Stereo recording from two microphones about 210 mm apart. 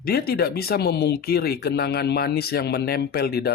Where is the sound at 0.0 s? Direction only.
45° left (ahead or behind).